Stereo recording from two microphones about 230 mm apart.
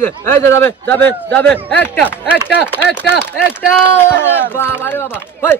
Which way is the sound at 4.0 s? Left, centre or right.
Centre.